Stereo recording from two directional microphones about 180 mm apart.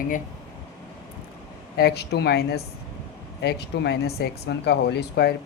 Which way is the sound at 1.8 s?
60° left (ahead or behind).